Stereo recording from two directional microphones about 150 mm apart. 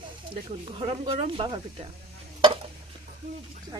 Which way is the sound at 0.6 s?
35° right (ahead or behind).